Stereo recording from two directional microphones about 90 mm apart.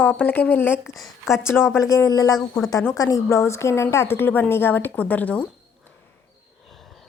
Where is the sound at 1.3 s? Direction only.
30° left (ahead or behind).